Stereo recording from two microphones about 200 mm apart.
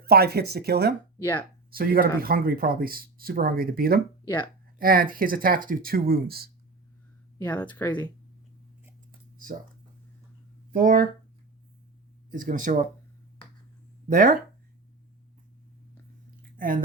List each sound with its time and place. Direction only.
0.0 s speech: 50° right (ahead or behind)
1.2 s speech: 10° left (ahead or behind)
1.7 s speech: 45° right (ahead or behind)
7.3 s speech: 10° left (ahead or behind)
10.7 s speech: 45° right (ahead or behind)
12.3 s speech: 40° right (ahead or behind)
14.1 s speech: 40° right (ahead or behind)
16.6 s speech: 45° right (ahead or behind)